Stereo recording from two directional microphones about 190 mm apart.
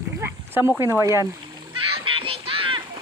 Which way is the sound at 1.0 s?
15° right (ahead or behind).